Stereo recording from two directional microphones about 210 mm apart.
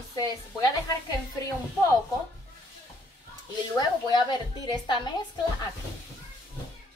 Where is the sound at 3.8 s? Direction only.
20° left (ahead or behind).